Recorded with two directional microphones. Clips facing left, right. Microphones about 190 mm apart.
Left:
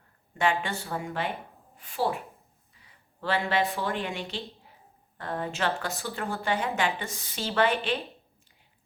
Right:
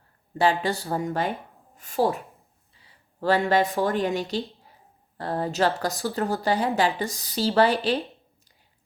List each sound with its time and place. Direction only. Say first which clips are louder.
0.6 s speech: right 7 dB; 35° right (ahead or behind)
2.7 s a sound: right 10 dB; 35° right (ahead or behind)
3.8 s speech: right 7 dB; 40° right (ahead or behind)